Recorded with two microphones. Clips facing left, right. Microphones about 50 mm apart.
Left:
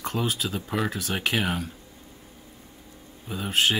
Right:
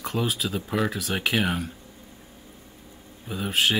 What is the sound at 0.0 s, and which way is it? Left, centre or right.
Speech, centre.